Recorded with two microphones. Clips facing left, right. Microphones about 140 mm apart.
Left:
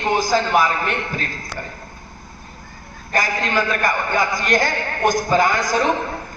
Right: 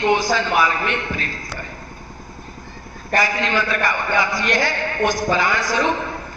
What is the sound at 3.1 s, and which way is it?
A man's voice, 45° left (ahead or behind).